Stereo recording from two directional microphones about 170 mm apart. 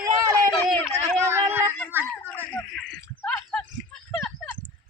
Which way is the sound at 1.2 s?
15° right (ahead or behind).